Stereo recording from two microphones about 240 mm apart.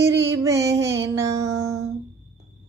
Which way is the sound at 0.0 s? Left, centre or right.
Right.